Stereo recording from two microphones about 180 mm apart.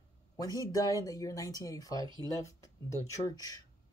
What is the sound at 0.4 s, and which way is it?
Speech, 20° left (ahead or behind).